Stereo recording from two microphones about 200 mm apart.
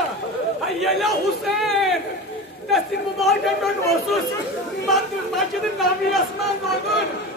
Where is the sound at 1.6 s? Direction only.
Centre (ahead or behind).